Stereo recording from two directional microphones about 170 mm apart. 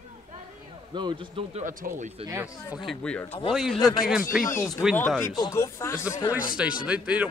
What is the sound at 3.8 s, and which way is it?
Speech, 20° left (ahead or behind).